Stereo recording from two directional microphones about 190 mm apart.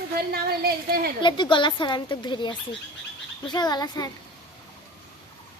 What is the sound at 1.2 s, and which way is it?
A woman's voice, 25° left (ahead or behind).